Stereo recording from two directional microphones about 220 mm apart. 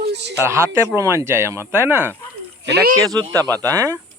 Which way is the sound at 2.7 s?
45° right (ahead or behind).